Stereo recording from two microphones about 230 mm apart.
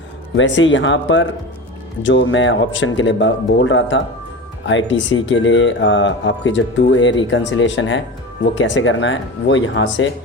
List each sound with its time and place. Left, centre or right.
0.3 s speech: left